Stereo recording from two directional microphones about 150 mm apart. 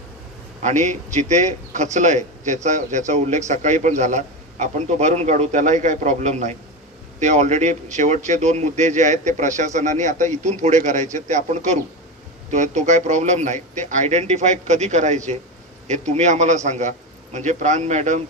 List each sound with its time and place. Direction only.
0.6 s a man's voice: 55° right (ahead or behind)